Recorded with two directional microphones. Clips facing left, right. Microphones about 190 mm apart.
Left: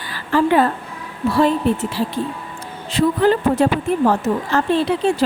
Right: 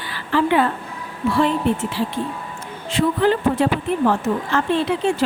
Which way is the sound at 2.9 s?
40° left (ahead or behind).